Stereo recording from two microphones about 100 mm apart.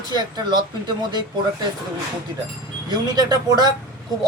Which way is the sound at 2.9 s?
40° right (ahead or behind).